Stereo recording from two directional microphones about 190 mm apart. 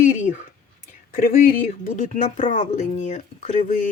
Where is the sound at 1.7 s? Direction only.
40° left (ahead or behind).